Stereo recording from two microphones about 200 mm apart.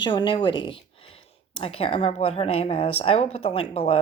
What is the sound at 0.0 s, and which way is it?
Speech, 25° left (ahead or behind).